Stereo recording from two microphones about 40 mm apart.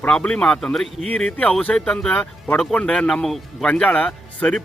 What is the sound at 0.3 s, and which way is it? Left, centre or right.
Speech, left.